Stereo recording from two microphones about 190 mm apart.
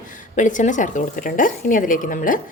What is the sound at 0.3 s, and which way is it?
A woman's voice, 40° left (ahead or behind).